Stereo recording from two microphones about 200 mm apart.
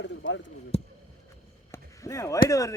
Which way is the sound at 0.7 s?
30° left (ahead or behind).